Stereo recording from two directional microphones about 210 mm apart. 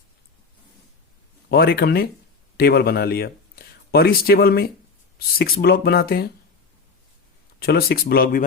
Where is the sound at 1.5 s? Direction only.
45° left (ahead or behind).